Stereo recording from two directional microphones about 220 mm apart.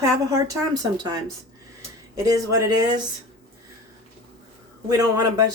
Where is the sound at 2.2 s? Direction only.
15° right (ahead or behind).